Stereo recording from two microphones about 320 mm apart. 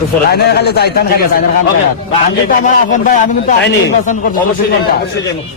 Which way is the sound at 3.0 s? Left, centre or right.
Left.